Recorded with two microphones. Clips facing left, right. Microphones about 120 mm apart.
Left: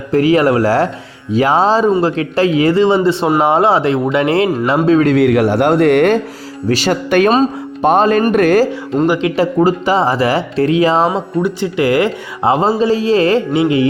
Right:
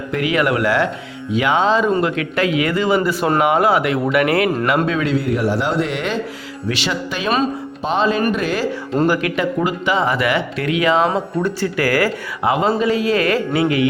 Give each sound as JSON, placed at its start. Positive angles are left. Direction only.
{"t": 0.1, "sound": "speech", "side_deg": 35}
{"t": 5.1, "sound": "a man's voice", "side_deg": 80}
{"t": 6.7, "sound": "speech", "side_deg": 40}
{"t": 9.0, "sound": "speech", "side_deg": 20}
{"t": 9.3, "sound": "speech", "side_deg": 35}
{"t": 11.4, "sound": "speech", "side_deg": 20}